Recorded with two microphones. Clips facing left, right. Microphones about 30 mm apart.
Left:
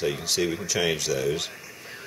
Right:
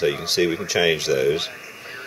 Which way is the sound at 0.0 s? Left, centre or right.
Right.